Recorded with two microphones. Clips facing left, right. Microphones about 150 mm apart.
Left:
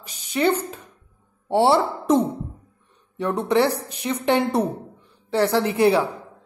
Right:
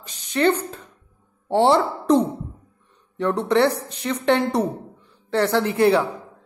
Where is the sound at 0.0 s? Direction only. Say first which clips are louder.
Right 1 dB; 10° left (ahead or behind).